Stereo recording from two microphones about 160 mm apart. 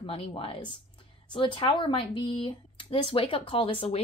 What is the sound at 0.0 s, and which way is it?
Speech, 35° left (ahead or behind).